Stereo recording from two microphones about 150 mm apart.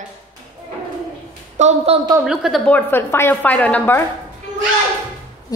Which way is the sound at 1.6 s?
50° right (ahead or behind).